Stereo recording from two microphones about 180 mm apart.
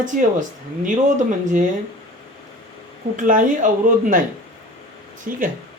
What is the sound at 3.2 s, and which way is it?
Speech, 50° right (ahead or behind).